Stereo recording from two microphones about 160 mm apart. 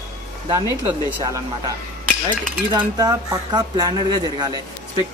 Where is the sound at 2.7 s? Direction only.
25° right (ahead or behind).